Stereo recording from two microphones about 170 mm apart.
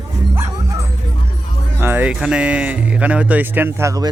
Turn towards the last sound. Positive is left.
turn(degrees=-20)  # may be behind; listen again after turning